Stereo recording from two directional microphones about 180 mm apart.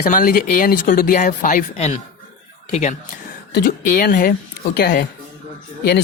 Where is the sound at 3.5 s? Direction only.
50° left (ahead or behind).